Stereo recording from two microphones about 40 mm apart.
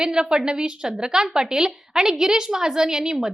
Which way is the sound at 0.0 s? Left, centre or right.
Centre.